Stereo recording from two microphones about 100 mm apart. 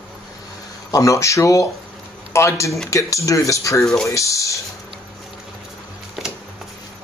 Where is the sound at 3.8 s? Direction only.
5° left (ahead or behind).